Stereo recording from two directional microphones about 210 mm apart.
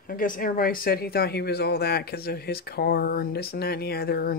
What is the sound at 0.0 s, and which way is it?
Speech, 40° left (ahead or behind).